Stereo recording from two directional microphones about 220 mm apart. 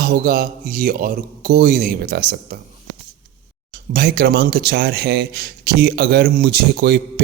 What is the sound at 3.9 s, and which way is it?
Speech, 45° right (ahead or behind).